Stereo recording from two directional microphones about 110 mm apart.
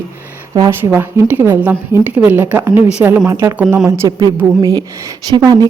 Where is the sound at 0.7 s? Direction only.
20° right (ahead or behind).